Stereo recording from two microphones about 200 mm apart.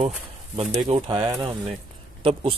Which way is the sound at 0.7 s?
20° right (ahead or behind).